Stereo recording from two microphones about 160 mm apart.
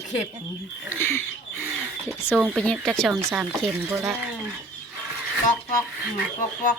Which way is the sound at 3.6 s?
20° right (ahead or behind).